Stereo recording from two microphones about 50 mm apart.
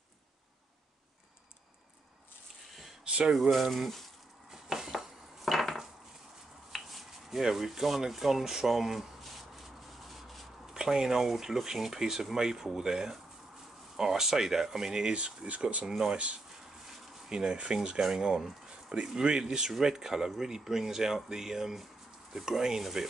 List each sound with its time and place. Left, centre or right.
3.3 s speech: centre
4.5 s dishes: centre
5.4 s a sound: centre
6.7 s speech: centre
10.0 s rub: centre
10.7 s speech: centre
15.9 s speech: centre
17.3 s speech: centre